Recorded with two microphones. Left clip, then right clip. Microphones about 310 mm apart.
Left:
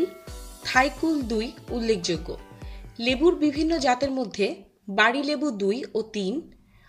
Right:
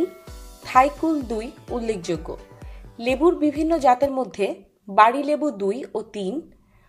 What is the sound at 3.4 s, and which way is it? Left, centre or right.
Speech, centre.